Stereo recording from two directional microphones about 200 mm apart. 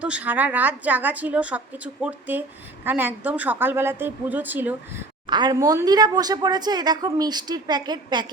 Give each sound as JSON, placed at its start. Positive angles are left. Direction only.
{"t": 0.0, "sound": "a woman's voice", "side_deg": -5}
{"t": 5.2, "sound": "speech", "side_deg": -20}